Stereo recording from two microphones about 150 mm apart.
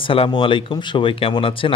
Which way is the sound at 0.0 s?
35° left (ahead or behind).